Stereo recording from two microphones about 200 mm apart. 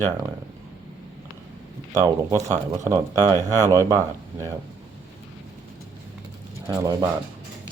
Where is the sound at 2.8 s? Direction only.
15° right (ahead or behind).